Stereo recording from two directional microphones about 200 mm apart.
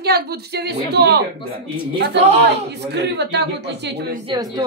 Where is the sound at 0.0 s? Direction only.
55° right (ahead or behind).